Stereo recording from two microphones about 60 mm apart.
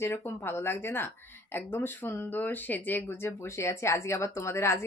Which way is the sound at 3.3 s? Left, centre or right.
Left.